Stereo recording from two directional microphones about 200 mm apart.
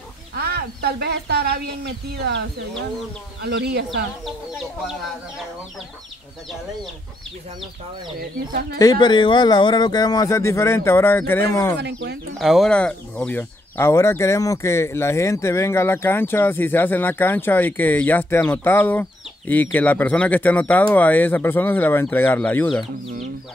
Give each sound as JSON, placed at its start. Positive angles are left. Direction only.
{"t": 0.4, "sound": "speech", "side_deg": -55}
{"t": 3.4, "sound": "speech", "side_deg": -55}
{"t": 4.5, "sound": "speech", "side_deg": 0}
{"t": 8.7, "sound": "speech", "side_deg": 20}
{"t": 11.8, "sound": "speech", "side_deg": -55}
{"t": 12.4, "sound": "speech", "side_deg": 0}